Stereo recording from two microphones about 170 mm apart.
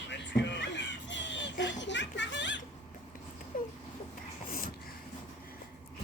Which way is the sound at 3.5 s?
50° left (ahead or behind).